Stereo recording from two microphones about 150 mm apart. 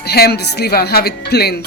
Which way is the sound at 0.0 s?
90° left.